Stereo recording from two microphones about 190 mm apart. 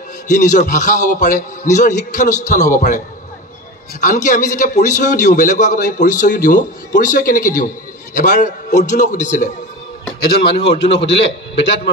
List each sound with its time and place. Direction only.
0.3 s a man's voice: 40° left (ahead or behind)
4.0 s a man's voice: 40° left (ahead or behind)
10.9 s a man's voice: 30° left (ahead or behind)
11.5 s a man's voice: 65° left (ahead or behind)